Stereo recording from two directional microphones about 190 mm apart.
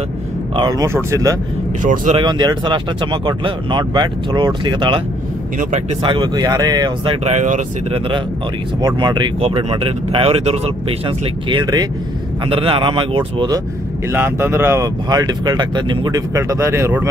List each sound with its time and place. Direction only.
0.6 s speech: 20° right (ahead or behind)
1.8 s speech: 40° right (ahead or behind)
2.2 s speech: 25° right (ahead or behind)
6.0 s speech: 25° right (ahead or behind)
7.2 s speech: 40° right (ahead or behind)
8.8 s speech: 25° right (ahead or behind)
14.1 s speech: 10° right (ahead or behind)